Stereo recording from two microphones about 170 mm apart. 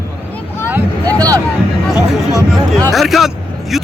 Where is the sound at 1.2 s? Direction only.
20° right (ahead or behind).